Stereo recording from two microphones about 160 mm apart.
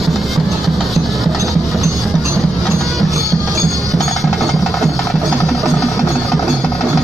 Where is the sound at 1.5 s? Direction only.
Centre (ahead or behind).